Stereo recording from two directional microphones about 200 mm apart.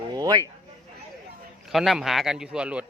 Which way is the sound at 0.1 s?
20° right (ahead or behind).